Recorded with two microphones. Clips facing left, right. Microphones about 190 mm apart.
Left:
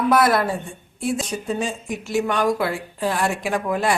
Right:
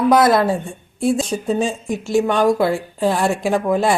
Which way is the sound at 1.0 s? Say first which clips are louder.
Right 6 dB; 25° right (ahead or behind).